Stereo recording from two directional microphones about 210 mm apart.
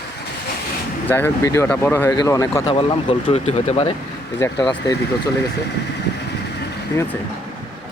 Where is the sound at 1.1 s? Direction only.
10° left (ahead or behind); by 3.9 s 30° left (ahead or behind).